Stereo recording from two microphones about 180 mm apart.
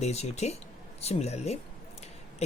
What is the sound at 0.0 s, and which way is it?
Speech, 35° left (ahead or behind).